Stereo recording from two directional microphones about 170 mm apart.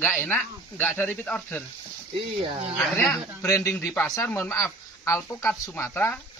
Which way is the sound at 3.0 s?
15° left (ahead or behind).